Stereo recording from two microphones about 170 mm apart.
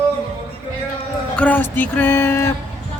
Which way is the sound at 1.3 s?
10° left (ahead or behind).